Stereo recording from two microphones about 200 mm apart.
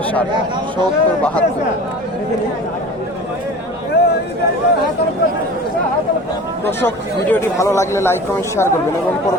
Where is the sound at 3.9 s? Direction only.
55° left (ahead or behind).